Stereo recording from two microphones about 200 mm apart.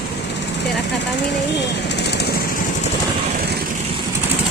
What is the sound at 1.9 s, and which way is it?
Speech, 55° left (ahead or behind).